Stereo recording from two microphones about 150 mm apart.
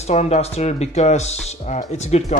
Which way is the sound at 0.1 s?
45° left (ahead or behind).